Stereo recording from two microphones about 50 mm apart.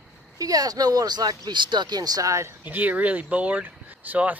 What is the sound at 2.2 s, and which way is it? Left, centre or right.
Speech, right.